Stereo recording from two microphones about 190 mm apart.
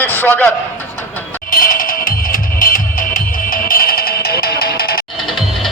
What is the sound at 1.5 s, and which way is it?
Music, 45° left (ahead or behind).